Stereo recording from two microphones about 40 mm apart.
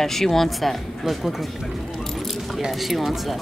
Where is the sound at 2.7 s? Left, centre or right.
Centre.